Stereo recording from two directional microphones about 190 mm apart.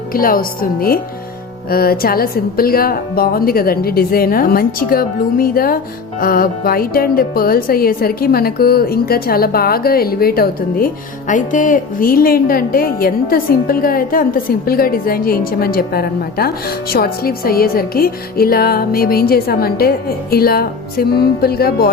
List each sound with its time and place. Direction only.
0.1 s speech: 50° left (ahead or behind)